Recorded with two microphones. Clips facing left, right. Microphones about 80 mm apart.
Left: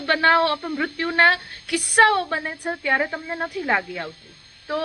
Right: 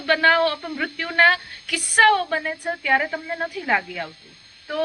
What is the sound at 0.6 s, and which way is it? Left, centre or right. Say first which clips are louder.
Speech: left 3 dB; left.